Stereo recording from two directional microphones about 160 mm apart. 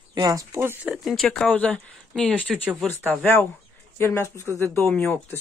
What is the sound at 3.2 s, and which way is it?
Speech, 15° left (ahead or behind).